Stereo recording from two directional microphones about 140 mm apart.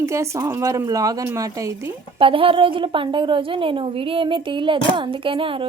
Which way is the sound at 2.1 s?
40° right (ahead or behind).